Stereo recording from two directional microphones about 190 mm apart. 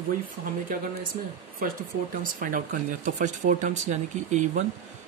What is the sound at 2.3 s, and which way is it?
Speech, 45° right (ahead or behind).